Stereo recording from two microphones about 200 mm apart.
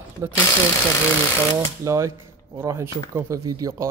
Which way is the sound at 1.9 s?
15° right (ahead or behind).